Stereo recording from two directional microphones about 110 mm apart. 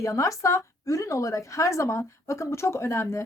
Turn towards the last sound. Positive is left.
turn(degrees=25)  # may be behind; listen again after turning